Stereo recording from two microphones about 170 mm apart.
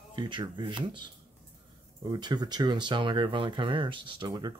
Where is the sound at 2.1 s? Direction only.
25° right (ahead or behind).